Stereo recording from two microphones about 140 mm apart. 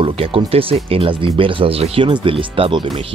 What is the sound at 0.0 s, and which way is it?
Speech, 40° right (ahead or behind).